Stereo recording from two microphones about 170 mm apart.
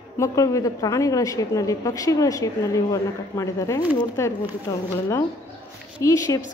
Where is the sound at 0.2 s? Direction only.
20° left (ahead or behind).